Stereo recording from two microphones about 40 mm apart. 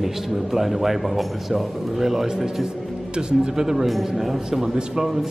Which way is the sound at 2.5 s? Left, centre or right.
Centre.